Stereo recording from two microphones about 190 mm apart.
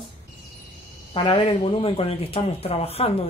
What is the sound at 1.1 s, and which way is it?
Speech, 25° left (ahead or behind).